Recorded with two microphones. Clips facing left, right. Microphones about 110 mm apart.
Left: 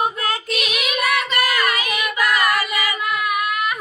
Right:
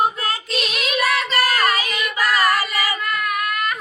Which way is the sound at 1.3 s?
35° right (ahead or behind).